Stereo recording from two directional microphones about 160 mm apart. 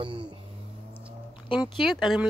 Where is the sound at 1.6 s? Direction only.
Centre (ahead or behind).